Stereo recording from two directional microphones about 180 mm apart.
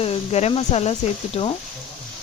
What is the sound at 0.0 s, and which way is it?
Speech, 35° left (ahead or behind).